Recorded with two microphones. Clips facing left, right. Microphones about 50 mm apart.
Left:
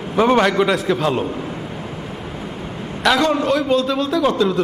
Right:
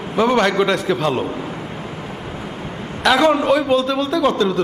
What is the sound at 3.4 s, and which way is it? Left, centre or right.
A man's voice, centre.